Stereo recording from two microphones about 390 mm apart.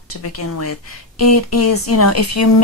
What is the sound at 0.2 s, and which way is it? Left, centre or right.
Speech, left.